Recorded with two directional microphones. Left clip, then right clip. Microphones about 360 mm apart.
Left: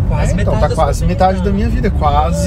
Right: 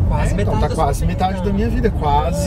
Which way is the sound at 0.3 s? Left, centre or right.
Centre.